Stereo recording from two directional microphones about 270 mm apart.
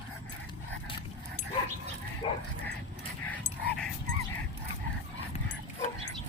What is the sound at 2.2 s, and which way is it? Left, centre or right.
Bow-wow, left.